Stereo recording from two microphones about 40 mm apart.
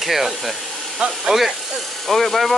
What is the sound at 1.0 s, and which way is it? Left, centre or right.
Speech, right.